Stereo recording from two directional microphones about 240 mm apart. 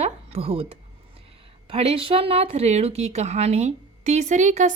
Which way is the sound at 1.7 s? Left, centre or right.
Right.